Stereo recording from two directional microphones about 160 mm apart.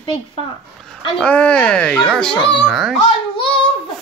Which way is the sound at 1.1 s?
5° left (ahead or behind).